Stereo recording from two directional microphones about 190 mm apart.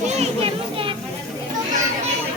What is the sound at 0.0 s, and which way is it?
Children playing, 35° right (ahead or behind).